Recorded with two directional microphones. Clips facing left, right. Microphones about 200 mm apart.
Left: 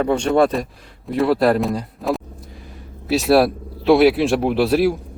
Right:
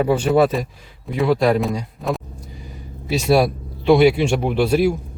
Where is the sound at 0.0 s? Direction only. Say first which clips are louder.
Even; 5° right (ahead or behind).